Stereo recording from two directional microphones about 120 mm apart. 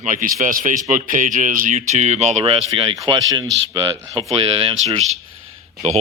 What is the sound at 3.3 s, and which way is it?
Speech, 35° right (ahead or behind).